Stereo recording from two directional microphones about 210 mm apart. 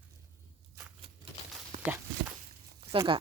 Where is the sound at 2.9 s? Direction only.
25° right (ahead or behind).